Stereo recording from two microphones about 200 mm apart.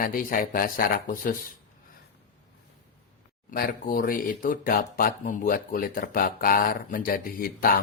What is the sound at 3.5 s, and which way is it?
Speech, 50° left (ahead or behind).